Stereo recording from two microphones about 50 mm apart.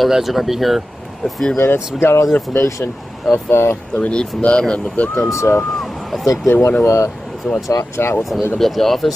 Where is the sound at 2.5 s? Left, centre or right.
Left.